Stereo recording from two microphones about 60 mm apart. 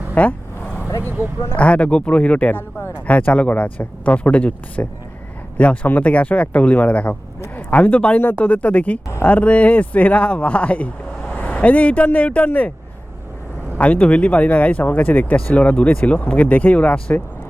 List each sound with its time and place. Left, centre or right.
0.1 s vehicle: left
1.5 s speech: left
8.2 s speech: left
13.7 s speech: left